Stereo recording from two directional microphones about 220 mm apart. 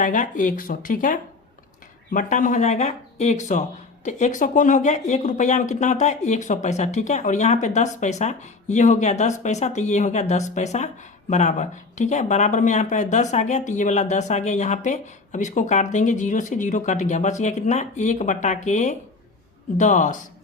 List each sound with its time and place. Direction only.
0.0 s speech: 35° left (ahead or behind)